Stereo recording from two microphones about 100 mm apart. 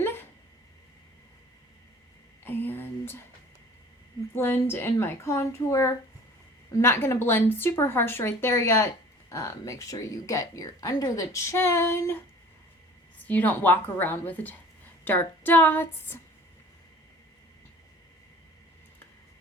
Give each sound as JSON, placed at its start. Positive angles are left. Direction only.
{"t": 2.4, "sound": "a sound", "side_deg": 20}
{"t": 4.4, "sound": "a woman's voice", "side_deg": 25}
{"t": 13.1, "sound": "a woman's voice", "side_deg": 15}